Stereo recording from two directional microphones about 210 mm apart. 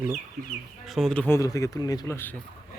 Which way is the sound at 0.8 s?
Centre (ahead or behind).